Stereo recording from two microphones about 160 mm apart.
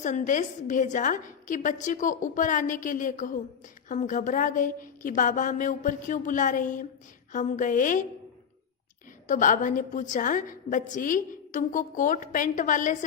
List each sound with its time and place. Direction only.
0.0 s a woman's voice: 50° left (ahead or behind)
9.2 s a woman's voice: 55° left (ahead or behind)